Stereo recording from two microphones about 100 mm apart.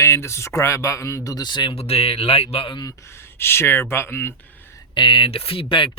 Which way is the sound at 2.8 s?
40° left (ahead or behind).